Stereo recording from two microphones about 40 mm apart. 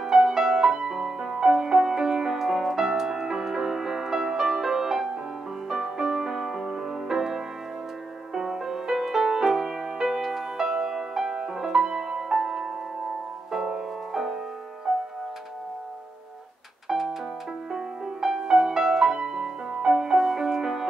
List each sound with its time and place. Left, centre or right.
0.0 s music: centre
16.8 s music: centre